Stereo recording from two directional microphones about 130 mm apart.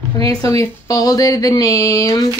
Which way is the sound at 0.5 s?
25° left (ahead or behind).